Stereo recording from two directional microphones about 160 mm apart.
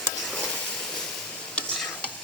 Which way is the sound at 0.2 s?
5° left (ahead or behind).